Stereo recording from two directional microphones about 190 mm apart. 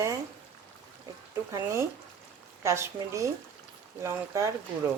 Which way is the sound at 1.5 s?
15° right (ahead or behind).